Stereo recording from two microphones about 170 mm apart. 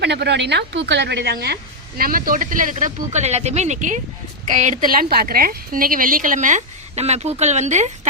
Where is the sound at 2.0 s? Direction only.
55° right (ahead or behind).